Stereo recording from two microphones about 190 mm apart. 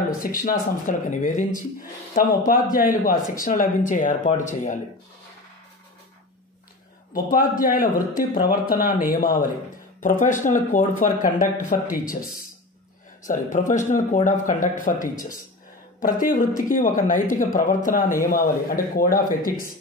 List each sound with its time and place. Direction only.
0.2 s speech: 45° left (ahead or behind)
7.2 s speech: 45° left (ahead or behind)
13.2 s speech: 40° left (ahead or behind)
16.2 s speech: 45° left (ahead or behind)